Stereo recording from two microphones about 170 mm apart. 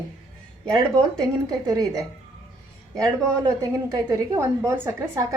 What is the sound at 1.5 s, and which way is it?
Speech, 20° right (ahead or behind).